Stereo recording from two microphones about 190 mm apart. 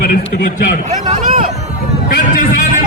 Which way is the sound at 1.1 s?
45° right (ahead or behind).